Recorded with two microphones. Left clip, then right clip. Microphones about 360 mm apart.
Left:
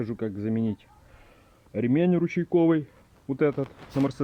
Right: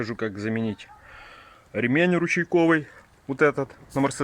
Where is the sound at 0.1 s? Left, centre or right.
Right.